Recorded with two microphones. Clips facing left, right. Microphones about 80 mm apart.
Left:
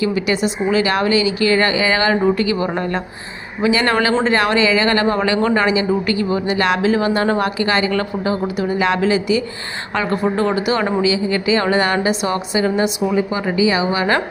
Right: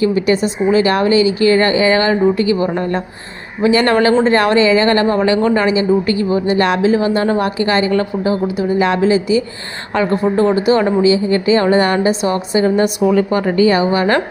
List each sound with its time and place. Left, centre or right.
0.0 s a woman's voice: right
3.6 s a woman's voice: right
12.8 s a woman's voice: right